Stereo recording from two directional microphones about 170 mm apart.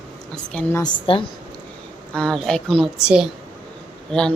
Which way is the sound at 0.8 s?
30° left (ahead or behind).